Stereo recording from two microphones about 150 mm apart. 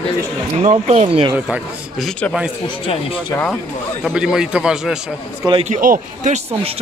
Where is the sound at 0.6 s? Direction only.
50° right (ahead or behind).